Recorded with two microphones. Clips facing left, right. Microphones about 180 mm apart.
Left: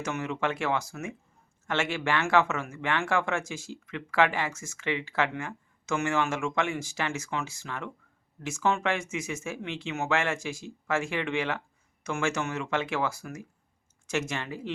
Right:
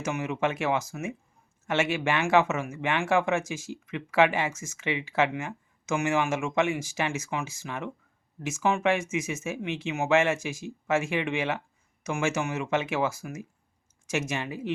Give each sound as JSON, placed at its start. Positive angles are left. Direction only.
{"t": 0.0, "sound": "speech", "side_deg": -15}